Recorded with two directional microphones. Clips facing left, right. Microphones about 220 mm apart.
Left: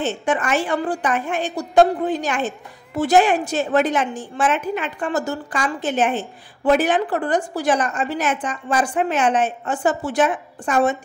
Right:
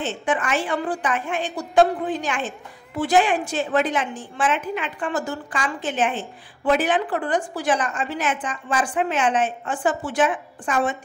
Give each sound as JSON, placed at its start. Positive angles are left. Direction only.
{"t": 0.0, "sound": "a woman's voice", "side_deg": 40}